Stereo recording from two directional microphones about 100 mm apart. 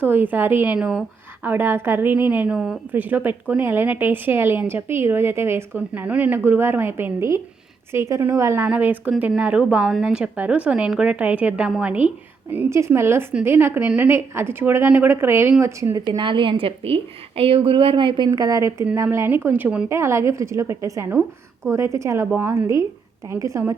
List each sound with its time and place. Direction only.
0.0 s a woman's voice: 20° right (ahead or behind)
8.6 s a woman's voice: 15° right (ahead or behind)
12.7 s a woman's voice: 25° right (ahead or behind)
16.0 s a woman's voice: 55° right (ahead or behind)
18.3 s a woman's voice: 40° right (ahead or behind)